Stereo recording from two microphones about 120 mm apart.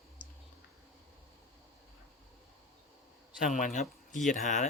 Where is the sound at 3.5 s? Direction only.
90° left.